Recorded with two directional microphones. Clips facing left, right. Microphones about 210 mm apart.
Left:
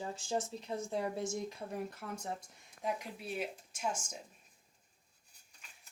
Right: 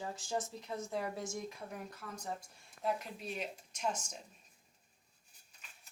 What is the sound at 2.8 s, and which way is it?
Speech, 10° left (ahead or behind).